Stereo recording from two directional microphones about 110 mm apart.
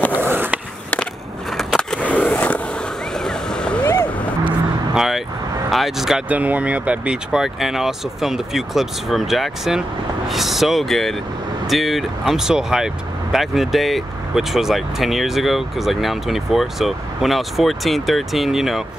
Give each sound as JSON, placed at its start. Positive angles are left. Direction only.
{"t": 0.2, "sound": "skateboard", "side_deg": -20}
{"t": 1.6, "sound": "skateboard", "side_deg": 5}
{"t": 3.3, "sound": "a sound", "side_deg": 5}
{"t": 3.8, "sound": "a sound", "side_deg": 30}
{"t": 4.5, "sound": "vehicle", "side_deg": -5}
{"t": 5.7, "sound": "speech", "side_deg": 0}